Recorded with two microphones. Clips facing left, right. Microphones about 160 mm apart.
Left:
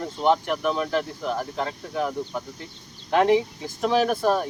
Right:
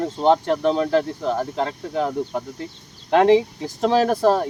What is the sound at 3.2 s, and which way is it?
Speech, 35° right (ahead or behind).